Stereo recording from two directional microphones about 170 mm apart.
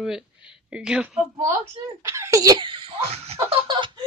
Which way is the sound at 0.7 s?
5° right (ahead or behind).